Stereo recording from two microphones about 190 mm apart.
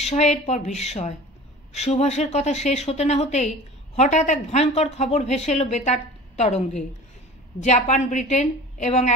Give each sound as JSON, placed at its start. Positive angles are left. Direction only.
{"t": 0.0, "sound": "speech", "side_deg": 35}